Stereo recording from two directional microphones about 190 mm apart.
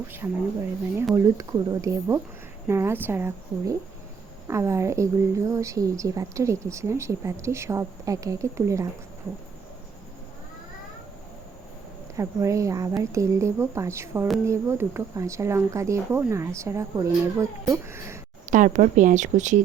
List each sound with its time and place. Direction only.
0.2 s a woman's voice: 15° right (ahead or behind)
12.1 s a woman's voice: 15° right (ahead or behind)
18.4 s speech: 40° right (ahead or behind)